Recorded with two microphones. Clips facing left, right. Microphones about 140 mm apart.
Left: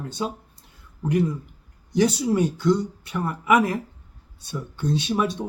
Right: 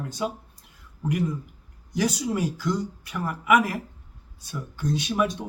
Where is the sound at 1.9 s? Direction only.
30° left (ahead or behind).